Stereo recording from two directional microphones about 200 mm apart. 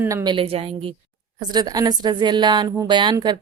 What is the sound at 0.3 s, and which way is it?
A woman's voice, 30° right (ahead or behind).